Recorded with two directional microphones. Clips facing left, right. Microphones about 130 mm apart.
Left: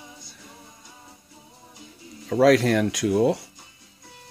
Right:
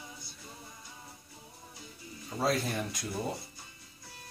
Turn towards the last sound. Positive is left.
turn(degrees=90)